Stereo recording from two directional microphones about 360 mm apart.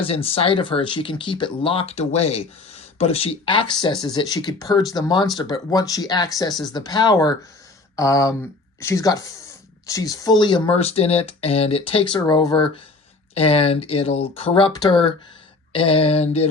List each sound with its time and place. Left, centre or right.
0.0 s speech: centre